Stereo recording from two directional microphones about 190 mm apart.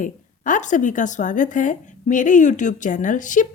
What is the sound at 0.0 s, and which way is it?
A woman's voice, 40° left (ahead or behind).